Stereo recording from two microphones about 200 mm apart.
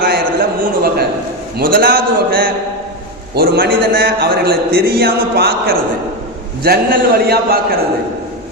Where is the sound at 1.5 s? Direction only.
45° right (ahead or behind).